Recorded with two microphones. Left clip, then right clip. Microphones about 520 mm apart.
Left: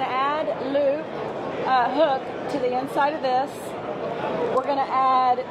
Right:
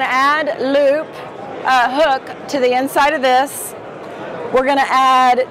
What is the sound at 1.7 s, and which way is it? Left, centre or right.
A woman's voice, right.